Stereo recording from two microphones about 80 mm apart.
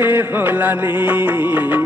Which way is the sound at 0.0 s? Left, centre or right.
Right.